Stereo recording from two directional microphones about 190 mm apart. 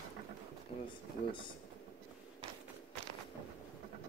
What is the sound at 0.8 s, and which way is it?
Speech, 25° left (ahead or behind).